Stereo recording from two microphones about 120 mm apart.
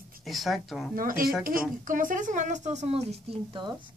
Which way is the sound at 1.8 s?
90° right.